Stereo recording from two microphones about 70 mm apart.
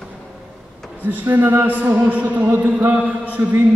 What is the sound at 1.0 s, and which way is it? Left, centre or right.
A man's voice, right.